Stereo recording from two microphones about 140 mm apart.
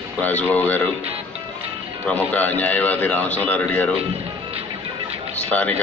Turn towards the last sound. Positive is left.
turn(degrees=10)  # may be behind; listen again after turning